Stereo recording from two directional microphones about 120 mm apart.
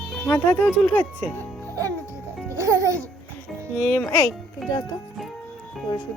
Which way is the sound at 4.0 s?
30° left (ahead or behind).